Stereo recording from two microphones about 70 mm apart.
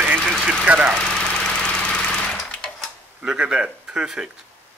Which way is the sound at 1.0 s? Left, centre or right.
Centre.